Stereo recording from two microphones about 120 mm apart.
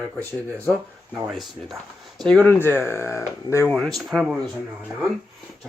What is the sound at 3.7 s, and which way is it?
Speech, centre (ahead or behind).